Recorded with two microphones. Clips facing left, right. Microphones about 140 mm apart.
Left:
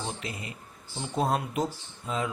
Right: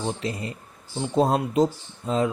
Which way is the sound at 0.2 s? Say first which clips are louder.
Right 8 dB; 35° right (ahead or behind).